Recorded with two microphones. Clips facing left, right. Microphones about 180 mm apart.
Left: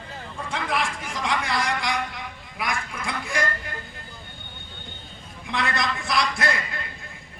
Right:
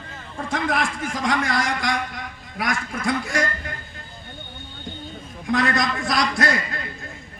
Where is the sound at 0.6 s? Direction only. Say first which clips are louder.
Right 2 dB; 45° right (ahead or behind).